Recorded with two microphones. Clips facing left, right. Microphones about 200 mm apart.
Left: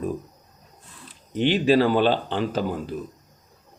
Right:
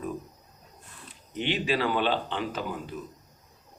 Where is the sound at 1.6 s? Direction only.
35° left (ahead or behind).